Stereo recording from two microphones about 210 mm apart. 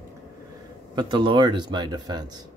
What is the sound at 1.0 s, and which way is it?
Speech, 20° right (ahead or behind).